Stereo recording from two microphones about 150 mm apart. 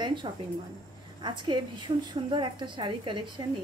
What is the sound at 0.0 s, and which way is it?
A woman's voice, 30° right (ahead or behind).